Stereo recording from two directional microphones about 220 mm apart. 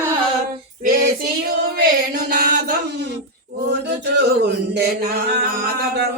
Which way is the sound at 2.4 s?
45° right (ahead or behind).